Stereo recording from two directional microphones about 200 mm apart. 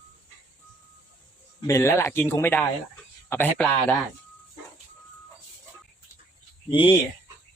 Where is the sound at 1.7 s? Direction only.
15° left (ahead or behind).